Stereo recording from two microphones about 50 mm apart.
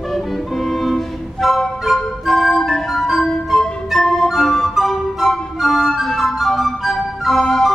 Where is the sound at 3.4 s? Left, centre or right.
Centre.